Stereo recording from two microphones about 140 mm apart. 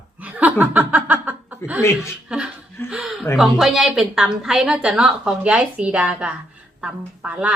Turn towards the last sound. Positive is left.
turn(degrees=-10)  # may be behind; listen again after turning